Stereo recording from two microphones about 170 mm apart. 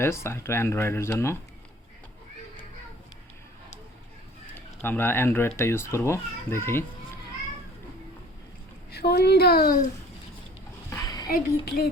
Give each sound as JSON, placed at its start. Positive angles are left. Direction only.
{"t": 0.0, "sound": "speech", "side_deg": 15}
{"t": 4.8, "sound": "speech", "side_deg": 10}
{"t": 8.9, "sound": "a woman's voice", "side_deg": 70}
{"t": 10.8, "sound": "a sound", "side_deg": 20}
{"t": 11.3, "sound": "speech", "side_deg": 65}